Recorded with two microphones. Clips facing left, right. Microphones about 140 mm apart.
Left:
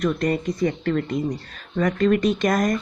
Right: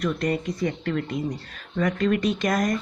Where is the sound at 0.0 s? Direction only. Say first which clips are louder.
Left 3 dB; 45° left (ahead or behind).